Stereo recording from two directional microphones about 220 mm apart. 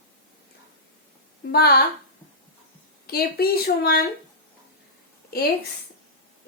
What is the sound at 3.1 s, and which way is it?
Speech, 45° left (ahead or behind).